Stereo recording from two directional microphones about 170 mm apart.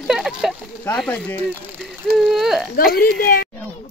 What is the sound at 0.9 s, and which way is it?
Speech, 10° left (ahead or behind).